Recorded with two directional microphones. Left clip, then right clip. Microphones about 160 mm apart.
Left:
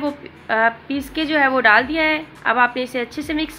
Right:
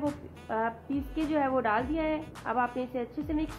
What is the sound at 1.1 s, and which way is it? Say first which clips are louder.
A woman's voice: left 12 dB; 5° left (ahead or behind).